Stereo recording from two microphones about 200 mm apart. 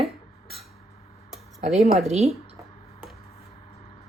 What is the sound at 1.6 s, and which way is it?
Speech, 35° right (ahead or behind).